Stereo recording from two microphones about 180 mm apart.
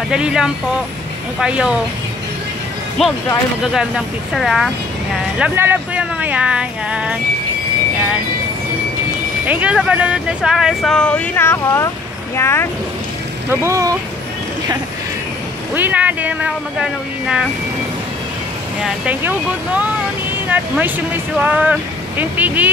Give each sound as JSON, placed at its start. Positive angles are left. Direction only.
{"t": 0.1, "sound": "speech", "side_deg": -5}
{"t": 3.0, "sound": "speech", "side_deg": 0}
{"t": 9.5, "sound": "speech", "side_deg": -5}
{"t": 13.5, "sound": "speech", "side_deg": -15}
{"t": 15.7, "sound": "speech", "side_deg": -10}
{"t": 19.0, "sound": "speech", "side_deg": -10}